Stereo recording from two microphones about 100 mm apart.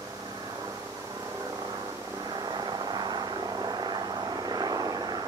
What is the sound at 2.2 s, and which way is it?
Vehicle, 45° right (ahead or behind).